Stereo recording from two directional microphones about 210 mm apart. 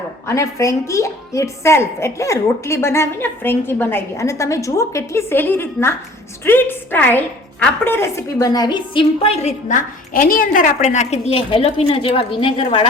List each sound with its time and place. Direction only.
0.3 s a woman's voice: 15° left (ahead or behind)